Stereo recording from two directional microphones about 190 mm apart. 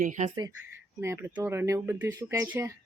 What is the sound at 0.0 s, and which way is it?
Speech, 40° right (ahead or behind).